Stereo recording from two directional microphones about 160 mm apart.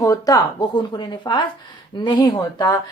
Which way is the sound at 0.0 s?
20° left (ahead or behind).